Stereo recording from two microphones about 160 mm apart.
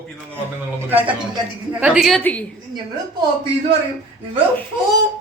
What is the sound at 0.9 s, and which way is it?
A woman's voice, 10° right (ahead or behind).